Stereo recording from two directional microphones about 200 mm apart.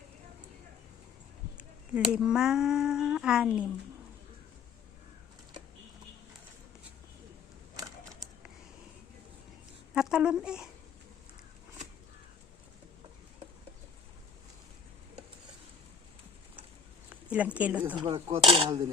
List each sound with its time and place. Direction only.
2.0 s speech: 5° right (ahead or behind)
9.9 s a child's voice: 5° right (ahead or behind)
17.1 s speech: 5° right (ahead or behind)
17.9 s speech: 25° right (ahead or behind)